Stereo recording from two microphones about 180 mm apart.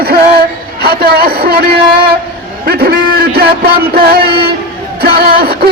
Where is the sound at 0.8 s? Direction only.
60° right (ahead or behind).